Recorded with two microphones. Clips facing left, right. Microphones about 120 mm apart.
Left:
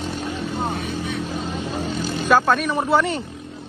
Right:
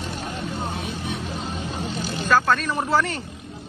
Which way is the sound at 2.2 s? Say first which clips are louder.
Left 2 dB; 10° left (ahead or behind).